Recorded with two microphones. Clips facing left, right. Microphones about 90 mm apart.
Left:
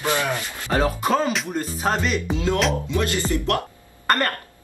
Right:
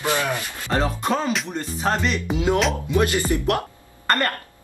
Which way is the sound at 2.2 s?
15° right (ahead or behind).